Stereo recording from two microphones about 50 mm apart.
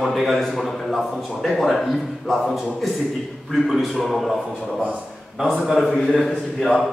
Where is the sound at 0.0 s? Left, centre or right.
Centre.